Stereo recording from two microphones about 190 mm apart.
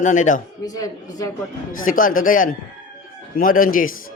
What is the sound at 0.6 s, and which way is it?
Speech, 20° left (ahead or behind).